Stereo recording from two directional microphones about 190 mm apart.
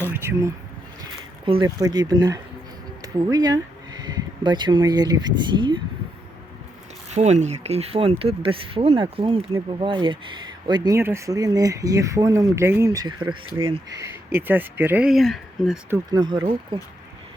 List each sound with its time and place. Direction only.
0.1 s a sound: 15° right (ahead or behind)
1.5 s speech: 25° right (ahead or behind)
7.1 s speech: 35° right (ahead or behind)
14.3 s speech: 10° right (ahead or behind)
16.0 s speech: 20° right (ahead or behind)